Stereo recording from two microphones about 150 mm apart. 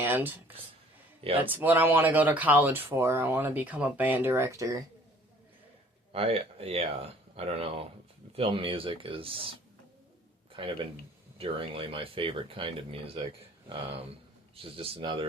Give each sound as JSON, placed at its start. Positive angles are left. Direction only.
{"t": 0.0, "sound": "speech", "side_deg": -15}
{"t": 6.1, "sound": "speech", "side_deg": -40}
{"t": 10.5, "sound": "speech", "side_deg": -35}
{"t": 14.5, "sound": "speech", "side_deg": -40}